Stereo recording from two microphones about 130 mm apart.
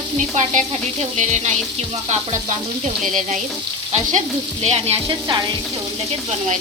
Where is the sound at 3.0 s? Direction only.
85° right.